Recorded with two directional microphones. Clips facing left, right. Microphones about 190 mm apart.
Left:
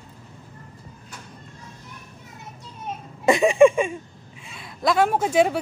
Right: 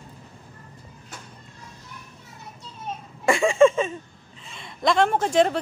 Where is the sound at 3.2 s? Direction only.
20° left (ahead or behind).